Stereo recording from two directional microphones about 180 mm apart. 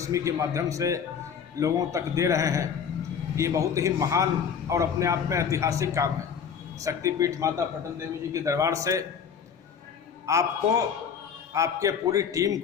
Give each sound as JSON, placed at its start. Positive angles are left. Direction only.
{"t": 0.0, "sound": "a man's voice", "side_deg": -15}
{"t": 10.2, "sound": "a man's voice", "side_deg": -15}